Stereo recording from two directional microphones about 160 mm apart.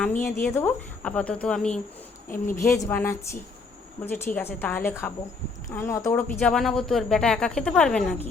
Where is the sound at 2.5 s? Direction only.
20° left (ahead or behind).